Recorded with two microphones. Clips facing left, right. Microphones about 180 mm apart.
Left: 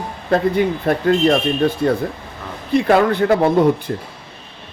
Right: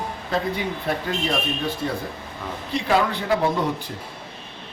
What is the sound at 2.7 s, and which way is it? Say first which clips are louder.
Speech: left 8 dB; 55° left (ahead or behind).